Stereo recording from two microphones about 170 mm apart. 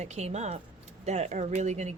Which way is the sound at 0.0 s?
40° right (ahead or behind).